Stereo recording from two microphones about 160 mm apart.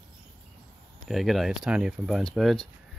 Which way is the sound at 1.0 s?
Centre (ahead or behind).